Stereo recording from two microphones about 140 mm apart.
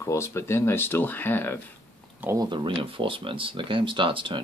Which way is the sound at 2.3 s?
35° right (ahead or behind).